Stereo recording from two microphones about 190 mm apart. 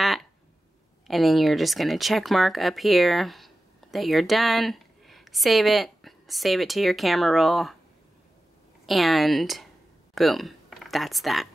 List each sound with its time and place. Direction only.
0.0 s a sound: centre (ahead or behind)
1.0 s speech: centre (ahead or behind)
8.8 s speech: centre (ahead or behind)